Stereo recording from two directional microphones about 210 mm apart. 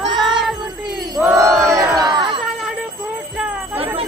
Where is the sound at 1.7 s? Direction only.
15° right (ahead or behind).